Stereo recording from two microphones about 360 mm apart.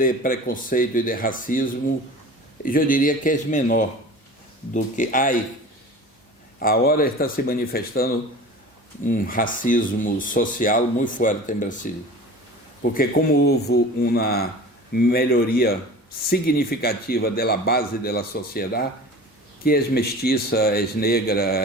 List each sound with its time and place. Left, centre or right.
0.0 s speech: left
6.6 s speech: left